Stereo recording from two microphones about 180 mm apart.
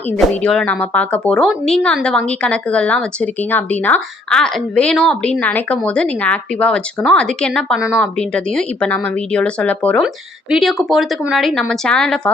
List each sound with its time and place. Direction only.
0.4 s speech: 5° left (ahead or behind)